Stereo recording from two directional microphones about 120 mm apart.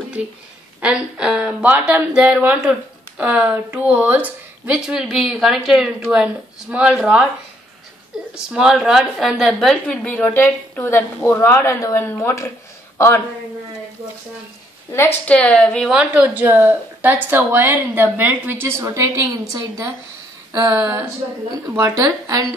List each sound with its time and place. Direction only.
0.7 s a woman's voice: 5° right (ahead or behind)
8.4 s a woman's voice: 5° right (ahead or behind); by 13.2 s 20° left (ahead or behind)
14.9 s a woman's voice: 20° left (ahead or behind)
15.9 s a woman's voice: 10° right (ahead or behind); by 19.9 s 25° right (ahead or behind)
21.7 s speech: 25° right (ahead or behind)